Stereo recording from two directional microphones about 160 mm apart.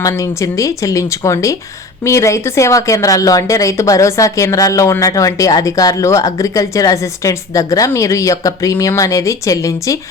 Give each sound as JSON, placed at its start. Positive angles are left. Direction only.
{"t": 0.0, "sound": "a woman's voice", "side_deg": 20}